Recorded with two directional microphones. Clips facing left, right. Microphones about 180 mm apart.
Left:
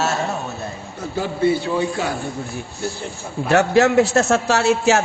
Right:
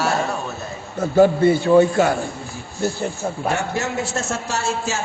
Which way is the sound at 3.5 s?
70° left (ahead or behind).